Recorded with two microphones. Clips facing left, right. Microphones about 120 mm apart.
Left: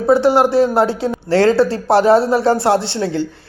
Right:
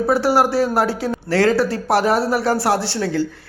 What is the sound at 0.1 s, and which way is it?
A woman's voice, 20° left (ahead or behind).